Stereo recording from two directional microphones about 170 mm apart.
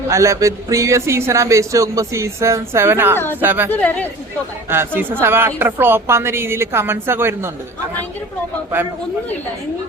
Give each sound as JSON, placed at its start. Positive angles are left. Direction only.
{"t": 0.1, "sound": "speech", "side_deg": -20}
{"t": 3.7, "sound": "speech", "side_deg": 10}
{"t": 4.7, "sound": "speech", "side_deg": -10}